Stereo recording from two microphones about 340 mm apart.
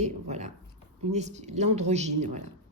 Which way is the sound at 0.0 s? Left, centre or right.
Centre.